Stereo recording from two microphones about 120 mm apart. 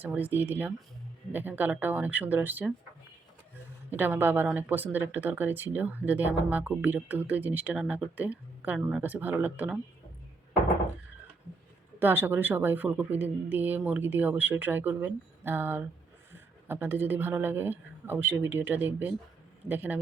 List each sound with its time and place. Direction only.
0.0 s speech: 15° right (ahead or behind)
3.8 s speech: 15° right (ahead or behind)
11.9 s speech: 15° right (ahead or behind)